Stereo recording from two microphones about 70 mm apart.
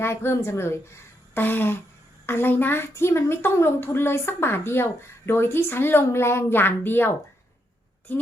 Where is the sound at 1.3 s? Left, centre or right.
Left.